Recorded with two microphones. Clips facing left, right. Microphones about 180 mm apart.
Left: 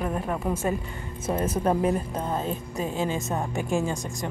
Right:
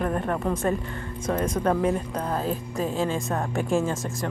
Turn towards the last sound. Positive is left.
turn(degrees=0)  # may be behind; listen again after turning